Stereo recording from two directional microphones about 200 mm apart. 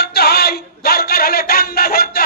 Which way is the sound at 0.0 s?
55° left (ahead or behind).